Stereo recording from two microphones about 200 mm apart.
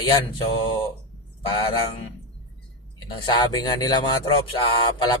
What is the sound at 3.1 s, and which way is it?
Speech, 25° left (ahead or behind).